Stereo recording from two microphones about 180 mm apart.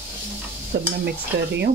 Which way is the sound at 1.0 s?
70° right (ahead or behind).